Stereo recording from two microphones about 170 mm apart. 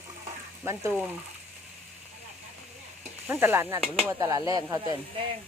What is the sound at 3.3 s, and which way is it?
Speech, 10° right (ahead or behind).